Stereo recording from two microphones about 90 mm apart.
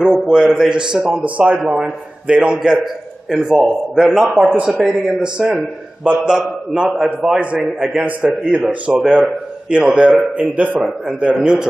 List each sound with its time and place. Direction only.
0.0 s a man's voice: centre (ahead or behind)
10.8 s a man's voice: centre (ahead or behind)